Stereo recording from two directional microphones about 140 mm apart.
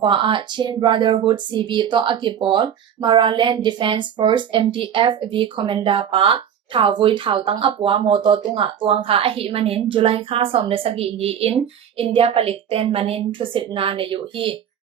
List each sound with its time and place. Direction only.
0.0 s speech: 35° right (ahead or behind)